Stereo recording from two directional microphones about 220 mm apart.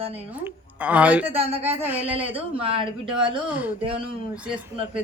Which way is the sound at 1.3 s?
25° right (ahead or behind).